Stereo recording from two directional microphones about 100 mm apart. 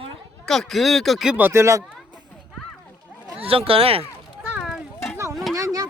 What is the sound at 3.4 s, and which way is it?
Speech, 70° right (ahead or behind).